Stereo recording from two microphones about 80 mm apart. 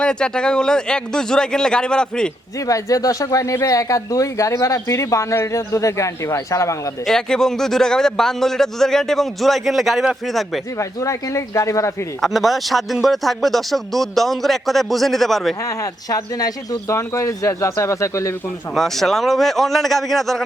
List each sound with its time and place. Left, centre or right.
0.0 s speech: centre
2.6 s speech: left
7.0 s a man's voice: centre
10.8 s speech: left
12.2 s a man's voice: centre
15.6 s speech: left
16.9 s speech: left
18.7 s a man's voice: centre